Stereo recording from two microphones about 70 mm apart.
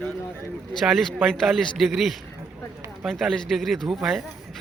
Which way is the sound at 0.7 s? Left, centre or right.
Centre.